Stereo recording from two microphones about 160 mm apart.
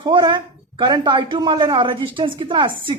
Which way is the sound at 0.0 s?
30° right (ahead or behind).